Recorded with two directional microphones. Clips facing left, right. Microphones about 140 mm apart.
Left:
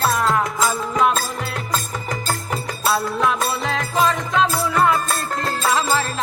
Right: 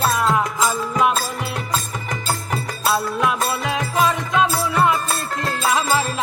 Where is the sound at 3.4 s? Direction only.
Centre (ahead or behind).